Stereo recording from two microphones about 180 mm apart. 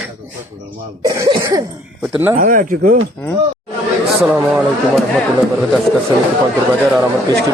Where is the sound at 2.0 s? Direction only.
10° right (ahead or behind).